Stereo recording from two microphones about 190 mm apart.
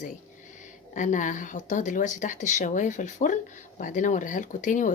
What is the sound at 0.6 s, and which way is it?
Speech, 40° left (ahead or behind).